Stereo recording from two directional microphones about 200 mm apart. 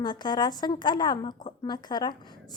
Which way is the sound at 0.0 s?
20° left (ahead or behind).